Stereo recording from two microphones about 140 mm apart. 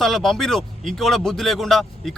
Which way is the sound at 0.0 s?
Centre (ahead or behind).